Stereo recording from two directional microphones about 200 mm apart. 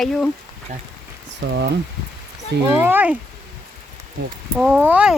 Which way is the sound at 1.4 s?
60° right (ahead or behind).